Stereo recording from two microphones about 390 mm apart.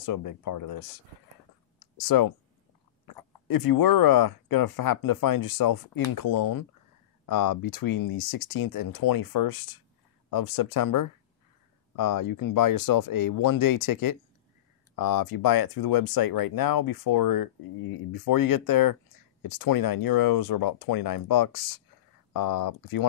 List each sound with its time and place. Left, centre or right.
0.0 s speech: left
2.0 s speech: left